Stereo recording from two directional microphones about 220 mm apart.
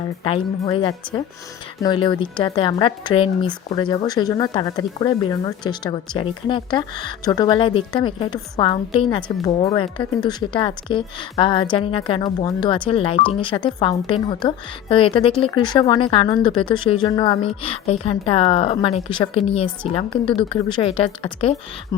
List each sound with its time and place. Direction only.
0.3 s speech: 25° left (ahead or behind)